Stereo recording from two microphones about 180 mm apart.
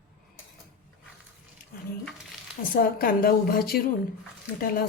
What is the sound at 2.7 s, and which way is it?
Speech, 55° left (ahead or behind).